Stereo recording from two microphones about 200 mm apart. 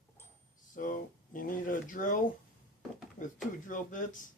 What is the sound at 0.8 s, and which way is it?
Speech, 40° left (ahead or behind).